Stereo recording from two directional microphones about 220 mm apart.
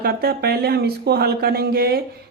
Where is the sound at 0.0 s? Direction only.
45° right (ahead or behind).